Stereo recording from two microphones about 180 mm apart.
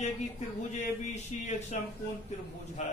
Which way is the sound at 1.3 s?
40° left (ahead or behind).